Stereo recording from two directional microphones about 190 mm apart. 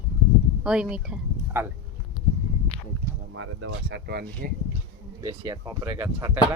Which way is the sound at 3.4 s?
90° right.